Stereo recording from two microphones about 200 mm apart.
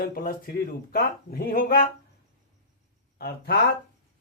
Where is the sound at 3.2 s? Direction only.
50° left (ahead or behind).